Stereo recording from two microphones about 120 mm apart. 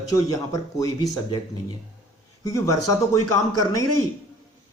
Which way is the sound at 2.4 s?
30° left (ahead or behind).